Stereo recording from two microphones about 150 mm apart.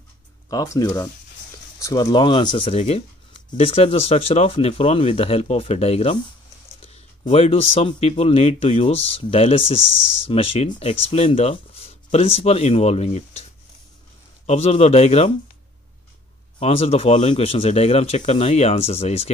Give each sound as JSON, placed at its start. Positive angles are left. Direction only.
{"t": 0.5, "sound": "speech", "side_deg": 25}
{"t": 16.5, "sound": "speech", "side_deg": 40}